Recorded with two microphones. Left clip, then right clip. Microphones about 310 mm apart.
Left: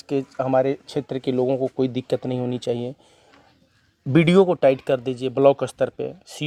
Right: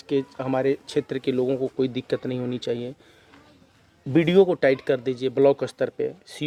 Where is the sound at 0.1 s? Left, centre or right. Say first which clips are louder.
Left 4 dB; left.